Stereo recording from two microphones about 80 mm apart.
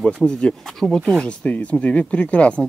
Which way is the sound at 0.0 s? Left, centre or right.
Centre.